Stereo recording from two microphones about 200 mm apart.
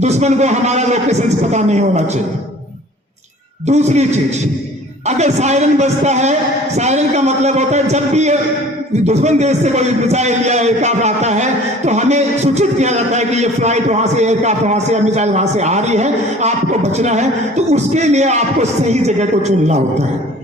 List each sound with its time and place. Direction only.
0.0 s a man's voice: 35° right (ahead or behind)
3.7 s a man's voice: 35° right (ahead or behind)
5.0 s a man's voice: 35° right (ahead or behind)